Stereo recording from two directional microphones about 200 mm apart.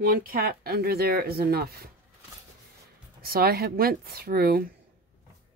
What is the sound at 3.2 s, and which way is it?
Speech, 50° right (ahead or behind).